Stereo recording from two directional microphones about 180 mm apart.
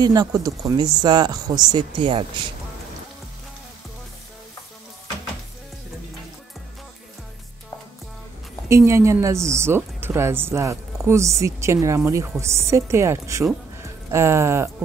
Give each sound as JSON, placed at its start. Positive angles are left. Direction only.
{"t": 0.0, "sound": "speech", "side_deg": -20}
{"t": 8.6, "sound": "speech", "side_deg": -15}